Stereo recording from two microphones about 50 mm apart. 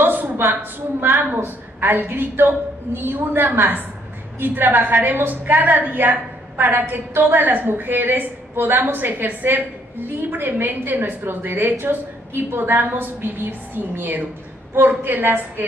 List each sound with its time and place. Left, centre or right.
0.0 s a woman's voice: right